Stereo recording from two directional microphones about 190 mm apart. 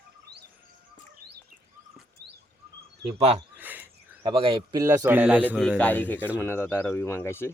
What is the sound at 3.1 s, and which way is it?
Speech, 35° right (ahead or behind).